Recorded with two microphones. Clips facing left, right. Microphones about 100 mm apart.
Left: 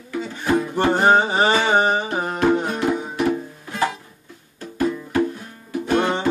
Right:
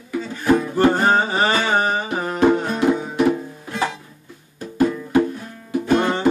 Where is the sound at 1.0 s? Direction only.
20° left (ahead or behind).